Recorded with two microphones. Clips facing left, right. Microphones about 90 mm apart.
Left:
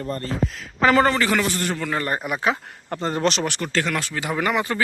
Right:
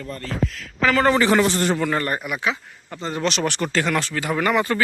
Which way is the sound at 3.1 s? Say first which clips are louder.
Left 1 dB; 40° left (ahead or behind).